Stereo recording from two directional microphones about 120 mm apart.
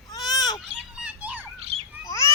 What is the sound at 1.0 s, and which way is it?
Children playing, 10° right (ahead or behind).